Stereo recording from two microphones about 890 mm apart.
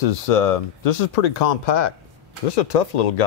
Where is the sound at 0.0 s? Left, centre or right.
Left.